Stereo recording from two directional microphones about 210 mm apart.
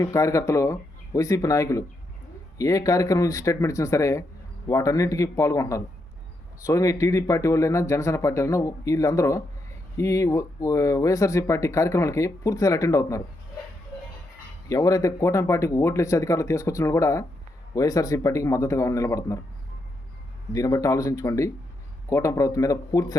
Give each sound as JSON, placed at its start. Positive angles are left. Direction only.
{"t": 0.0, "sound": "speech", "side_deg": 15}
{"t": 14.7, "sound": "speech", "side_deg": 15}
{"t": 20.5, "sound": "speech", "side_deg": 15}